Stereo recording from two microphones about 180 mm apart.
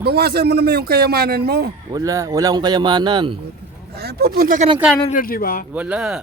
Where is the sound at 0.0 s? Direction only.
60° right (ahead or behind).